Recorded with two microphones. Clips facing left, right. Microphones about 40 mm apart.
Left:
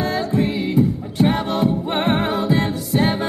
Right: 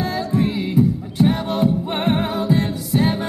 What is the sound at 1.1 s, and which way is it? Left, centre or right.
Music, left.